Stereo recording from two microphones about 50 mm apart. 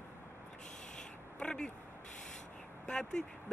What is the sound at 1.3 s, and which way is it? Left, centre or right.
Speech, centre.